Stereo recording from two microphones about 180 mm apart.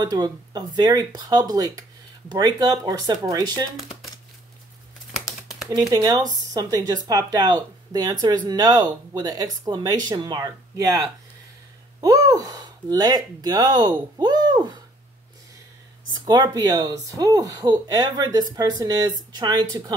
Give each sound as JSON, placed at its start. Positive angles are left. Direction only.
{"t": 0.0, "sound": "speech", "side_deg": -25}
{"t": 5.7, "sound": "speech", "side_deg": -20}
{"t": 16.3, "sound": "speech", "side_deg": -20}